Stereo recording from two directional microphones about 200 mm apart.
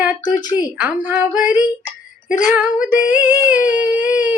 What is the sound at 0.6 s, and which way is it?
Speech, 10° right (ahead or behind).